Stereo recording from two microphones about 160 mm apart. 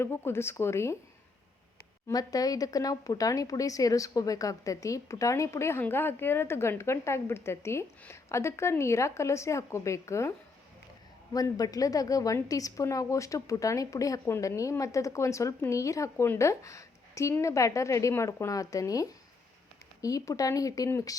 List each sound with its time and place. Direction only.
0.0 s speech: 15° left (ahead or behind)
2.0 s speech: 20° left (ahead or behind)
11.3 s a woman's voice: 25° left (ahead or behind)